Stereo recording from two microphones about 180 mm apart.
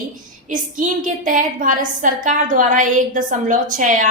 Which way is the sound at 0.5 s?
45° right (ahead or behind).